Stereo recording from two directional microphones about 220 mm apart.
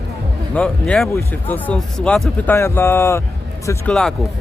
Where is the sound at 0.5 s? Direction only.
5° left (ahead or behind).